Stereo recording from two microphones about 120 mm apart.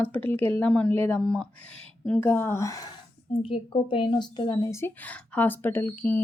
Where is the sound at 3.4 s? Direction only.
50° left (ahead or behind).